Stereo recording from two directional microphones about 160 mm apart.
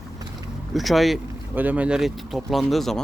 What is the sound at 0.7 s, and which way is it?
Speech, centre (ahead or behind).